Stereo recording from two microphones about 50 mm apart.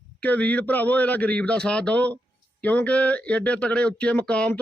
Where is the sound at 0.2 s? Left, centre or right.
Left.